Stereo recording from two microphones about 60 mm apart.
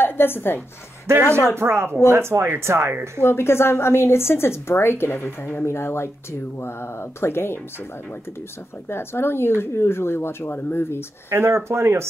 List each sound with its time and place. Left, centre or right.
0.0 s a woman's voice: left
1.6 s speech: right
3.2 s a woman's voice: left
8.8 s speech: left
11.2 s speech: right